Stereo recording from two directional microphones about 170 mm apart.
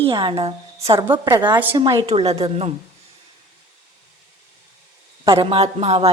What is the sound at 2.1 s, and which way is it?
Speech, 35° right (ahead or behind).